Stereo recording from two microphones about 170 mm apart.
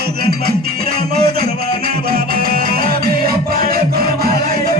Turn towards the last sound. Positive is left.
turn(degrees=-60)  # may be behind; listen again after turning